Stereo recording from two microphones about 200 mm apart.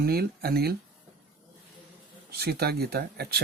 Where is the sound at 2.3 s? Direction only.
50° right (ahead or behind).